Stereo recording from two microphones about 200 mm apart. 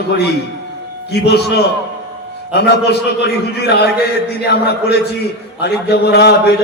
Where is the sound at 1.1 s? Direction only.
55° left (ahead or behind).